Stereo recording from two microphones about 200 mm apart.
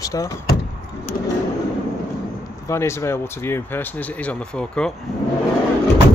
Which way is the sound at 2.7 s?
15° left (ahead or behind).